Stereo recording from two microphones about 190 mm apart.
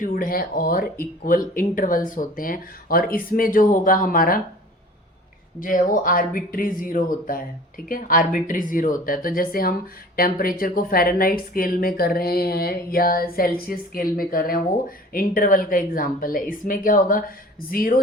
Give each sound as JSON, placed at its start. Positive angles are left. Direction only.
{"t": 0.0, "sound": "speech", "side_deg": 45}
{"t": 5.5, "sound": "speech", "side_deg": 45}